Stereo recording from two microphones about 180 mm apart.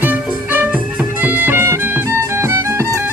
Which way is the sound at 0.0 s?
10° right (ahead or behind).